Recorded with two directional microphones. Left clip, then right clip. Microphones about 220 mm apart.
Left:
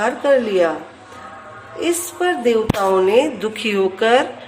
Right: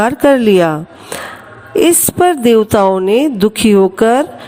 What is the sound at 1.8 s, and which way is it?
A woman's voice, 50° right (ahead or behind).